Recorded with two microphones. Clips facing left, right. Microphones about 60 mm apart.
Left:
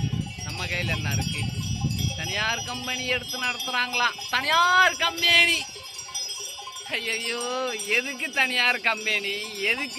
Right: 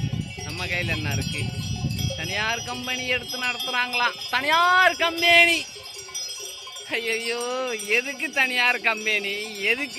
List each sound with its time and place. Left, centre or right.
0.5 s wind chime: centre
2.2 s wind chime: centre
3.7 s wind chime: centre
5.2 s speech: centre
6.9 s speech: centre